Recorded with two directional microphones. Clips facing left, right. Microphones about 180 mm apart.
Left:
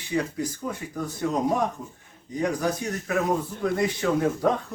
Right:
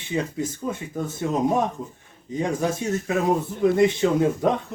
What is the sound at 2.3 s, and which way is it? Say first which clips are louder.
Speech: right 1 dB; 25° right (ahead or behind).